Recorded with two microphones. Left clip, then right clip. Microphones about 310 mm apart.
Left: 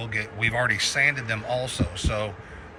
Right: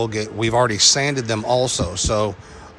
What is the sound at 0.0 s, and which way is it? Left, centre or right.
Speech, centre.